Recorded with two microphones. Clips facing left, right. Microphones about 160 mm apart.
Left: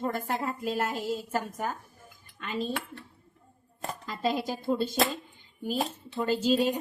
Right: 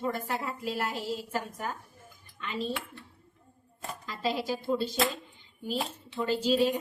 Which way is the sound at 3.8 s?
50° left (ahead or behind).